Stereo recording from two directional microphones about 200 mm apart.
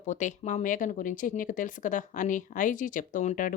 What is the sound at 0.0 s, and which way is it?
A woman's voice, 40° left (ahead or behind).